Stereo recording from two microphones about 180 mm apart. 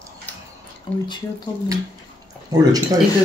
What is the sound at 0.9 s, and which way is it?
Speech, 10° left (ahead or behind).